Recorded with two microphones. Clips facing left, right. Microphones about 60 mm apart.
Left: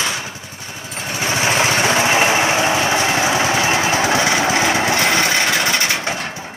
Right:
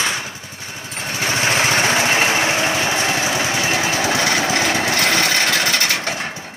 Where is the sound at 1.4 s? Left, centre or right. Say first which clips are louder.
Left 1 dB; centre.